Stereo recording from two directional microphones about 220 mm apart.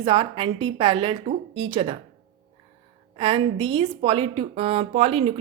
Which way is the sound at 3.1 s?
25° right (ahead or behind).